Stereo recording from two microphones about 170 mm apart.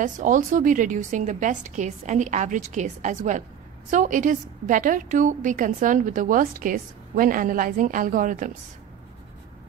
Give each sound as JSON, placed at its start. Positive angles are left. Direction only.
{"t": 0.0, "sound": "a woman's voice", "side_deg": -50}